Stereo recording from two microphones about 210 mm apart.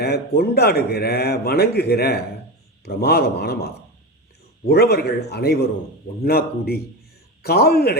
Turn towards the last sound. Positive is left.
turn(degrees=45)  # may be behind; listen again after turning